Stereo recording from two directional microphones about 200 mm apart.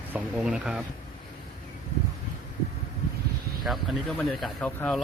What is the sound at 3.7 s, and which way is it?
Speech, 5° right (ahead or behind).